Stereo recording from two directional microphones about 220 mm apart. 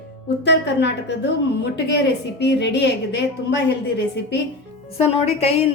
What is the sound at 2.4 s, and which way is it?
A woman's voice, 50° left (ahead or behind).